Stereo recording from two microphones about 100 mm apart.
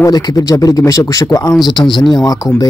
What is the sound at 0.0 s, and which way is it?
Speech, 40° left (ahead or behind).